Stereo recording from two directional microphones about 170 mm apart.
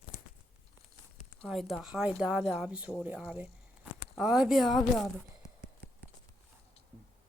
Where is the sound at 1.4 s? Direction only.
Centre (ahead or behind).